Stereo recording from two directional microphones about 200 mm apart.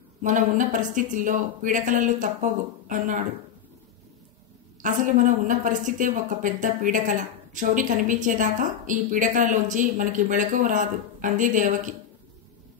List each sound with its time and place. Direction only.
0.2 s a woman's voice: 40° right (ahead or behind)
4.8 s a woman's voice: 40° right (ahead or behind)